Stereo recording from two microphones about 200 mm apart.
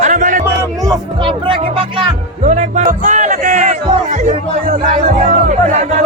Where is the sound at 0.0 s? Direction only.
40° right (ahead or behind).